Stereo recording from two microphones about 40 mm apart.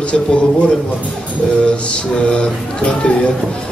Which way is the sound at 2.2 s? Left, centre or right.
Left.